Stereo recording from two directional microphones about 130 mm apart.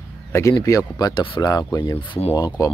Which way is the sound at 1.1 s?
40° left (ahead or behind).